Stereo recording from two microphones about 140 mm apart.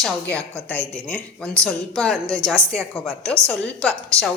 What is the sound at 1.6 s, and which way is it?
A woman's voice, 5° left (ahead or behind).